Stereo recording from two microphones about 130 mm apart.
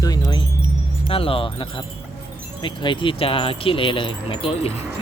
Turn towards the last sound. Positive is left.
turn(degrees=50)  # may be behind; listen again after turning